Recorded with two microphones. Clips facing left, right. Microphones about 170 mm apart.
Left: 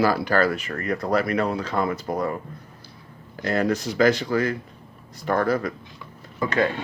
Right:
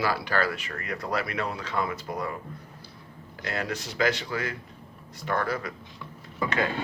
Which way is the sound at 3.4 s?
40° left (ahead or behind).